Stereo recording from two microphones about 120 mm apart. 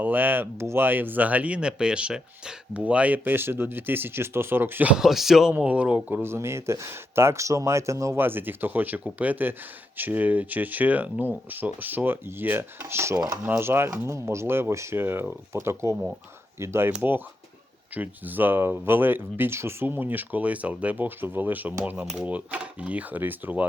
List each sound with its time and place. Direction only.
0.0 s speech: 15° right (ahead or behind)